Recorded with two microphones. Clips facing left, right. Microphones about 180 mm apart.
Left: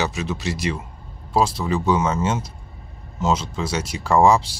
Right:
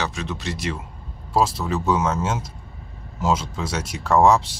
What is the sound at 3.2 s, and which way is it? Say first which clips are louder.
Speech: left 1 dB; 5° right (ahead or behind).